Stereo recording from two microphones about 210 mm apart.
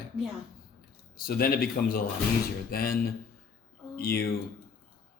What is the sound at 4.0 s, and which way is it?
Speech, 45° left (ahead or behind).